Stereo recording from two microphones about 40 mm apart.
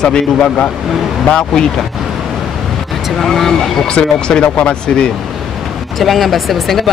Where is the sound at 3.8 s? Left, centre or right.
Left.